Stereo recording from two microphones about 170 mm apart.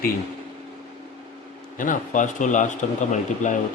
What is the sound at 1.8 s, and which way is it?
A man's voice, 50° left (ahead or behind).